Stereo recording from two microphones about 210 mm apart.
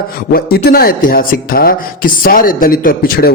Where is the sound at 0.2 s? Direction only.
45° left (ahead or behind).